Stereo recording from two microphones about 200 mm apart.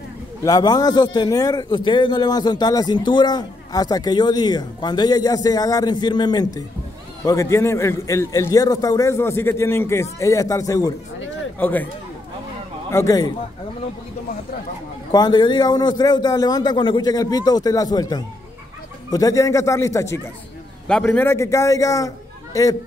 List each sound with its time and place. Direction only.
0.4 s a man's voice: 20° left (ahead or behind)
12.9 s a man's voice: 15° left (ahead or behind)
15.0 s a man's voice: 20° left (ahead or behind)